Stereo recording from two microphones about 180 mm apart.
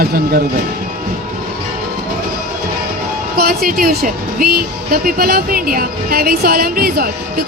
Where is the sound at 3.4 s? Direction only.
55° right (ahead or behind).